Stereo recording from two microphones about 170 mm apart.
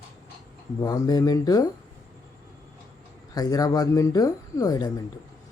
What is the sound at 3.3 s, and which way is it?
Speech, 20° left (ahead or behind).